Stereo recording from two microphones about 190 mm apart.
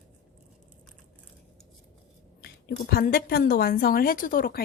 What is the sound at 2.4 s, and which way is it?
A woman's voice, 55° left (ahead or behind).